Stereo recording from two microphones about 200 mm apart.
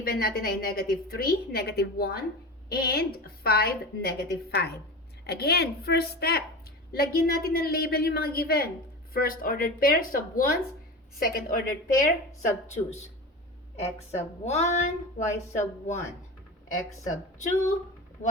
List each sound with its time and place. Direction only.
0.0 s a woman's voice: 50° left (ahead or behind)
18.2 s speech: 35° left (ahead or behind)